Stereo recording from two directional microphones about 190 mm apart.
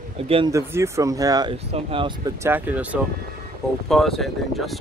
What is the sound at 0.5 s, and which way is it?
Speech, 15° right (ahead or behind).